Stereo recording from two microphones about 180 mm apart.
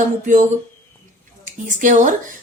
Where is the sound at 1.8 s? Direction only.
45° right (ahead or behind).